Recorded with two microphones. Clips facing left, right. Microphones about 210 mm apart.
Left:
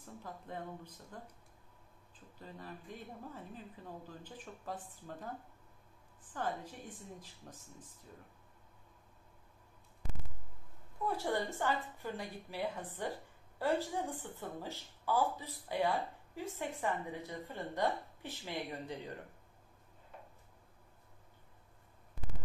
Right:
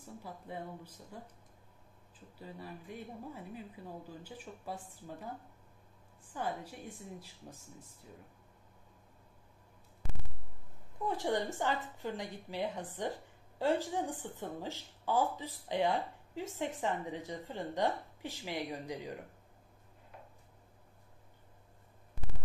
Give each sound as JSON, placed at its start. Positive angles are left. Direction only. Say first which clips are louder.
{"t": 0.0, "sound": "speech", "louder": "right 1 dB", "side_deg": -10}
{"t": 2.3, "sound": "a woman's voice", "louder": "right 2 dB", "side_deg": -10}
{"t": 11.1, "sound": "a woman's voice", "louder": "right 2 dB", "side_deg": -20}